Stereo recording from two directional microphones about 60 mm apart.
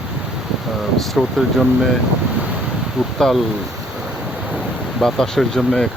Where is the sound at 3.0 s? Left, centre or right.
Centre.